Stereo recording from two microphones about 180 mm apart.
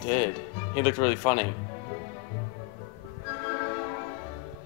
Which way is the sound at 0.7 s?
20° left (ahead or behind).